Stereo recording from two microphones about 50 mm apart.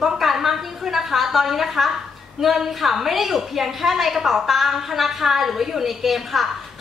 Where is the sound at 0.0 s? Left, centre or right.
Centre.